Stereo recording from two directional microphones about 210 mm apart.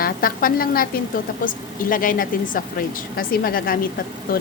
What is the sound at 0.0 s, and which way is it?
A woman's voice, 45° left (ahead or behind).